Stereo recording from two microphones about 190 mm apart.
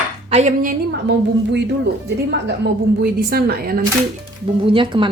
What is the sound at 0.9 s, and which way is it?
A woman's voice, 65° right (ahead or behind).